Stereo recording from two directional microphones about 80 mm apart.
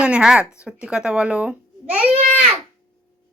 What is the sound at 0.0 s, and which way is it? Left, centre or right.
Speech, centre.